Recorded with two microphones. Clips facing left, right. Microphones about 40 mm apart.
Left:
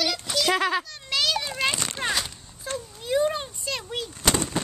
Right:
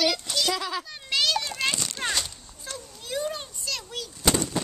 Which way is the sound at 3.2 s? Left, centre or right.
Left.